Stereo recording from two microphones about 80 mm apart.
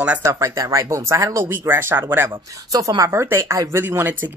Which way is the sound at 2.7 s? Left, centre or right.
Right.